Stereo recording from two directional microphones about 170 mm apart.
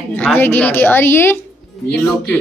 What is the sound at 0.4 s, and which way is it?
A woman's voice, 10° left (ahead or behind).